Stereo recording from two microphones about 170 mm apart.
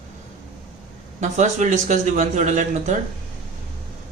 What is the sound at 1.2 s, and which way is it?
A man's voice, 45° right (ahead or behind).